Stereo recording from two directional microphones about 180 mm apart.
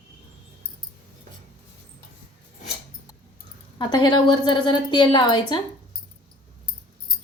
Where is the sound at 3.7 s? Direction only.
25° left (ahead or behind).